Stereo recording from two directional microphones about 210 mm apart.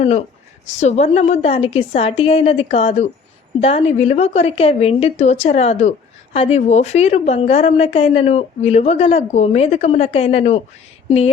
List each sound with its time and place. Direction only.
0.0 s a woman's voice: 30° left (ahead or behind)